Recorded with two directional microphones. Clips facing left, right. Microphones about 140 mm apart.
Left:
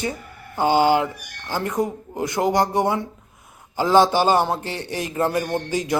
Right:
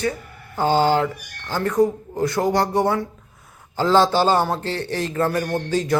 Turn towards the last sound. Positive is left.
turn(degrees=15)  # may be behind; listen again after turning